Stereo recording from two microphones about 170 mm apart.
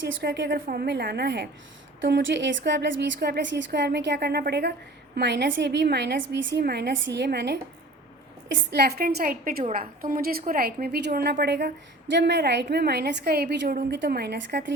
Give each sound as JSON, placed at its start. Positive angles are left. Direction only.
{"t": 0.0, "sound": "a woman's voice", "side_deg": -85}
{"t": 2.0, "sound": "a woman's voice", "side_deg": -90}
{"t": 5.1, "sound": "a woman's voice", "side_deg": -85}
{"t": 8.7, "sound": "a woman's voice", "side_deg": -70}
{"t": 12.1, "sound": "a woman's voice", "side_deg": -85}